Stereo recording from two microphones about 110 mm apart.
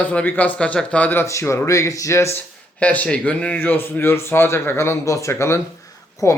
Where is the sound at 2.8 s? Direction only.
15° left (ahead or behind).